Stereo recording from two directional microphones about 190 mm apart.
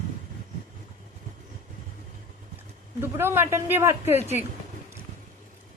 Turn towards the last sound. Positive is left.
turn(degrees=-10)  # may be behind; listen again after turning